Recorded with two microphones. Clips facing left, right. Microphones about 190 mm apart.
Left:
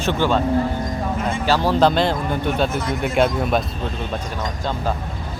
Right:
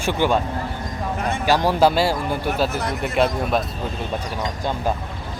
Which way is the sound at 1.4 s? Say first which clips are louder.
Even; 15° right (ahead or behind).